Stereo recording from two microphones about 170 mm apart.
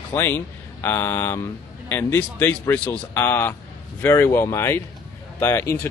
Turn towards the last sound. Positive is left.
turn(degrees=15)  # may be behind; listen again after turning